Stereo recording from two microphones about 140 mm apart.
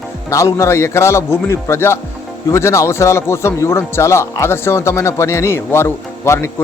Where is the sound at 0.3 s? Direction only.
20° left (ahead or behind).